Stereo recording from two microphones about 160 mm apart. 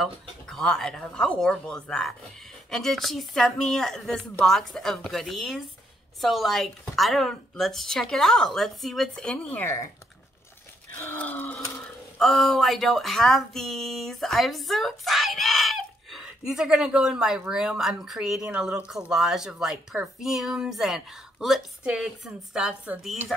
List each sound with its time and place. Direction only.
0.0 s speech: 5° left (ahead or behind)
10.9 s a sound: 10° left (ahead or behind)
12.2 s speech: centre (ahead or behind)